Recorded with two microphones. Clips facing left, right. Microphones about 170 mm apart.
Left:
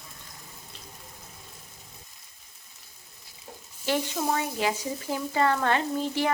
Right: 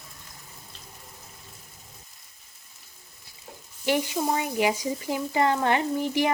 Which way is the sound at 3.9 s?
15° right (ahead or behind).